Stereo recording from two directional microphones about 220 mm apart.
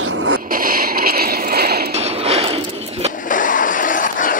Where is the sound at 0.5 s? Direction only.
40° right (ahead or behind).